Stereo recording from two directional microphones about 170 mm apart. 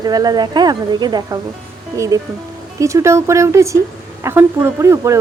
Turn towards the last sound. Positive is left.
turn(degrees=-15)  # may be behind; listen again after turning